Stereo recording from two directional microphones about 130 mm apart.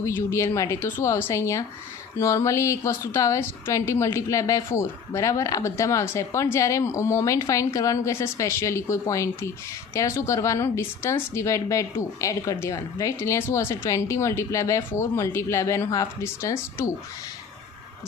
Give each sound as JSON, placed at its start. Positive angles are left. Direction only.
{"t": 0.0, "sound": "a woman's voice", "side_deg": 20}